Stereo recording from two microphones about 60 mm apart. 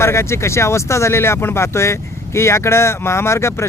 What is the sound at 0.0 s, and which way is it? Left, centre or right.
Speech, left.